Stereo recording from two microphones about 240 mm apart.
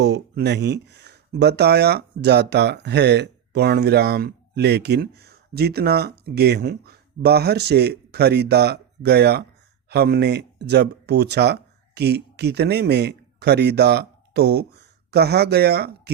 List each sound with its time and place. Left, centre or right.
0.0 s speech: right